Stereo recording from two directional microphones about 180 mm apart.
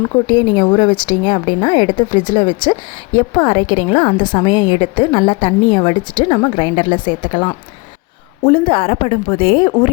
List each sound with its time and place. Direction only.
0.0 s a woman's voice: 25° left (ahead or behind)